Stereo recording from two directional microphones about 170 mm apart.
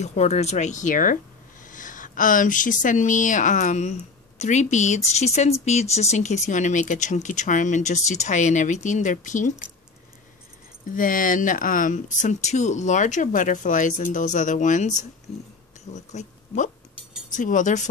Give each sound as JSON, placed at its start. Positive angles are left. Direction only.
{"t": 0.0, "sound": "speech", "side_deg": 40}
{"t": 11.0, "sound": "speech", "side_deg": 55}